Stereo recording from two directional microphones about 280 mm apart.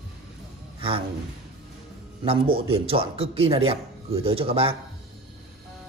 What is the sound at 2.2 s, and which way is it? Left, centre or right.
A man's voice, right.